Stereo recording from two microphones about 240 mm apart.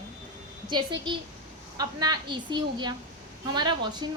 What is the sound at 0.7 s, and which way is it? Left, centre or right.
A woman's voice, centre.